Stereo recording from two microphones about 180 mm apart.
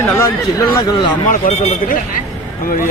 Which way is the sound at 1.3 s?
45° left (ahead or behind).